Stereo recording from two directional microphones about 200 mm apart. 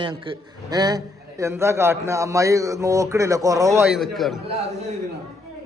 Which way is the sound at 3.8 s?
Centre (ahead or behind).